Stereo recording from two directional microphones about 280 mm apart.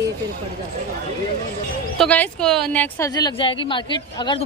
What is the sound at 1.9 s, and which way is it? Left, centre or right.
A woman's voice, centre.